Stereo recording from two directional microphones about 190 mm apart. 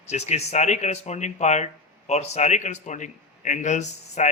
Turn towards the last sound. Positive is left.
turn(degrees=40)  # may be behind; listen again after turning